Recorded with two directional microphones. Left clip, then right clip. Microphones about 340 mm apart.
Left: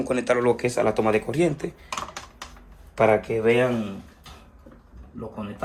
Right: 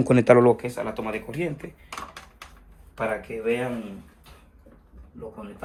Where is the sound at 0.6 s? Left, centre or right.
Centre.